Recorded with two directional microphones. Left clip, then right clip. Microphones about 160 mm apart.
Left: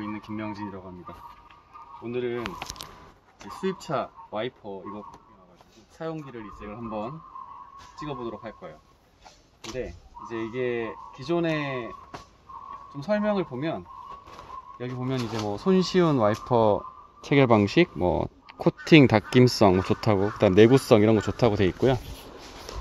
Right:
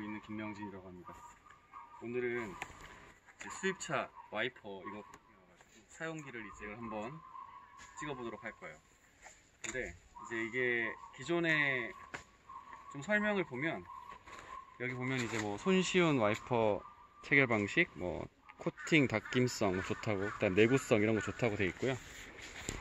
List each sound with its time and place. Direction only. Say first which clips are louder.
0.0 s speech: left 10 dB; 5° left (ahead or behind)
3.8 s speech: left 8 dB; 5° left (ahead or behind)
10.3 s speech: left 6 dB; 25° left (ahead or behind)
13.0 s speech: left 8 dB; 20° left (ahead or behind)
15.1 s speech: left 8 dB; 5° right (ahead or behind)
15.5 s speech: left 9 dB; 35° left (ahead or behind)
16.4 s speech: left 11 dB; 50° left (ahead or behind)
17.3 s speech: left 10 dB; 90° left; by 21.7 s 35° left (ahead or behind)